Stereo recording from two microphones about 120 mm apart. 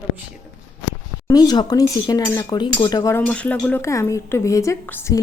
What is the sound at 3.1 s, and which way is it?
Speech, 10° left (ahead or behind).